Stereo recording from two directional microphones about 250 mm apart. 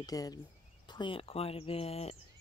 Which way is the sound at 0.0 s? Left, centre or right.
Centre.